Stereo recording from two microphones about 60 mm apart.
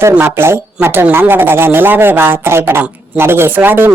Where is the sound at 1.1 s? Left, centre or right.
Right.